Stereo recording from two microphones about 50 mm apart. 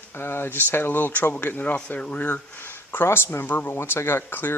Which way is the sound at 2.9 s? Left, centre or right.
Left.